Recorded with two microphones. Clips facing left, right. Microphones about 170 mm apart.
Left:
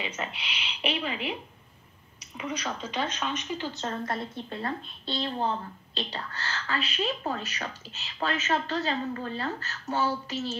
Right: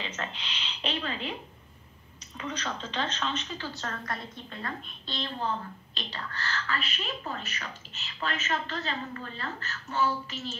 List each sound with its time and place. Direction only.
0.0 s a woman's voice: 10° left (ahead or behind)
2.3 s a woman's voice: 10° left (ahead or behind); by 10.5 s 30° left (ahead or behind)